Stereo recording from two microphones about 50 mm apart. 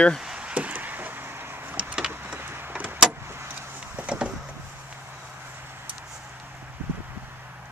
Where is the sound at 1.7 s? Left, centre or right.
Right.